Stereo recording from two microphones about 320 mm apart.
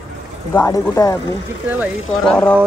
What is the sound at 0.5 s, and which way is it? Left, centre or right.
Speech, centre.